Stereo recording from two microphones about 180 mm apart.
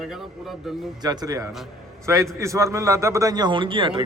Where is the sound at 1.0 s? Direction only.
20° right (ahead or behind).